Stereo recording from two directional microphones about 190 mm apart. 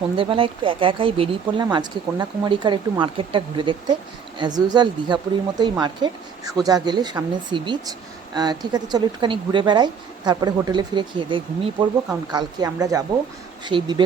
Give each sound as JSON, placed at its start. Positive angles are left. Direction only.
{"t": 0.2, "sound": "speech", "side_deg": -25}